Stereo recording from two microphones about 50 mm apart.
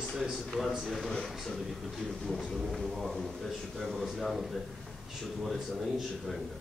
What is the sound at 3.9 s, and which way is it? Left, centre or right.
Speech, centre.